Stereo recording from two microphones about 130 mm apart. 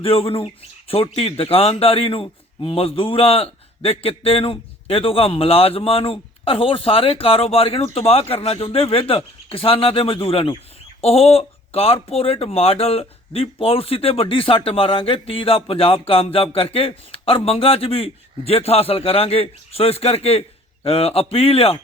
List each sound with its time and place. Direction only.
0.0 s speech: 45° left (ahead or behind)